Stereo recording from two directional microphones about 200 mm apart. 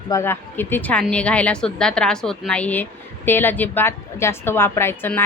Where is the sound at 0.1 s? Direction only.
10° left (ahead or behind).